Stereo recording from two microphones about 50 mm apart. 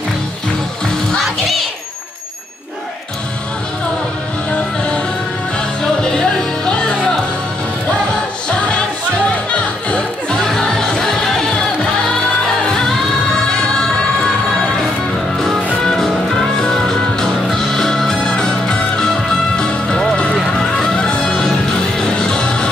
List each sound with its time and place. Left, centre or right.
5.8 s music: centre
8.5 s music: left
10.3 s music: centre
12.6 s music: centre
16.0 s music: centre
20.3 s music: centre